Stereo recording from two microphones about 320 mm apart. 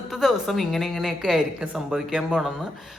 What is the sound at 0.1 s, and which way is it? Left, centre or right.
A woman's voice, centre.